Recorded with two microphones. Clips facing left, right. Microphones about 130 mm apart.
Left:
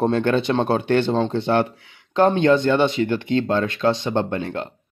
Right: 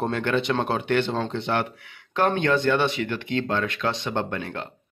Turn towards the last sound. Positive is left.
turn(degrees=25)  # may be behind; listen again after turning